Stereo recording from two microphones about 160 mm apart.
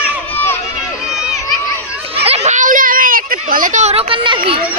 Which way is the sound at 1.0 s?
5° right (ahead or behind).